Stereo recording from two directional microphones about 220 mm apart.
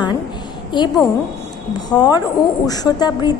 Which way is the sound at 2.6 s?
15° left (ahead or behind).